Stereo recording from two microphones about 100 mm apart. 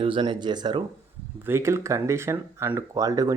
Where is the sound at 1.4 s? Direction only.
25° right (ahead or behind).